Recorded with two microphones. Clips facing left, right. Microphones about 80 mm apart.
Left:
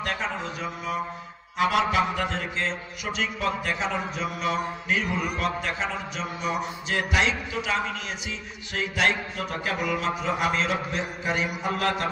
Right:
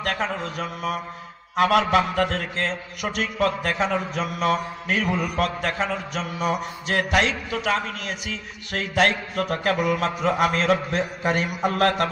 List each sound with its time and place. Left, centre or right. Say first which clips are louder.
0.0 s mantra: right 3 dB; right